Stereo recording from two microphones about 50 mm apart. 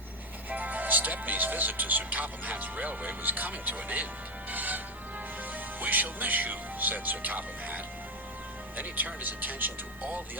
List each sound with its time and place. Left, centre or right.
0.5 s speech: right
5.8 s speech: right